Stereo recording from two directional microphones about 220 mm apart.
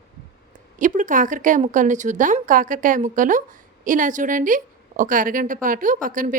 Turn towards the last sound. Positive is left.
turn(degrees=-40)  # may be behind; listen again after turning